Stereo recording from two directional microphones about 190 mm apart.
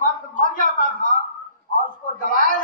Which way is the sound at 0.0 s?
45° left (ahead or behind).